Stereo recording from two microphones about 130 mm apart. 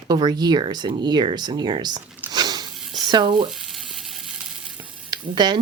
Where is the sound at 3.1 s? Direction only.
35° right (ahead or behind).